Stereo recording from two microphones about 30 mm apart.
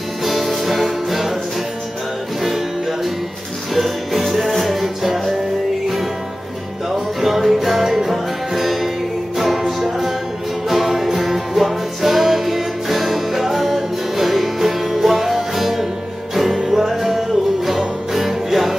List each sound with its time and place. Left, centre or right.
0.2 s music: centre
2.4 s music: centre
6.9 s music: centre
16.5 s music: centre
16.8 s music: centre